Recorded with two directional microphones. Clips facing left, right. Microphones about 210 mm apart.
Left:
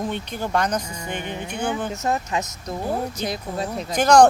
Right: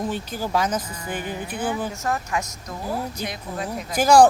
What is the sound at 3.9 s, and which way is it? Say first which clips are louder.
Speech: even; 5° right (ahead or behind).